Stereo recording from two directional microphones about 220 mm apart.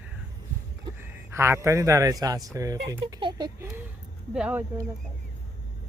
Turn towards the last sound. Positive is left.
turn(degrees=-5)  # may be behind; listen again after turning